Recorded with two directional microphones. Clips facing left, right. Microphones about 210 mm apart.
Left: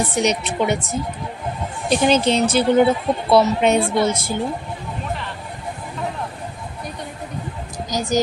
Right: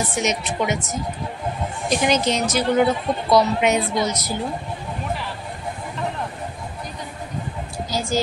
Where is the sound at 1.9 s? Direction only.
30° left (ahead or behind).